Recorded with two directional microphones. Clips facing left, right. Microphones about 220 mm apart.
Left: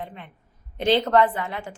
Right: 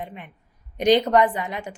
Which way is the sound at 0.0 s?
15° right (ahead or behind).